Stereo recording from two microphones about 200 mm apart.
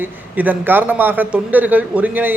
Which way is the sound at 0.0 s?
10° right (ahead or behind).